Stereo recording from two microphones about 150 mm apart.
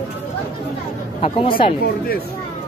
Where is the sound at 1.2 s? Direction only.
35° left (ahead or behind).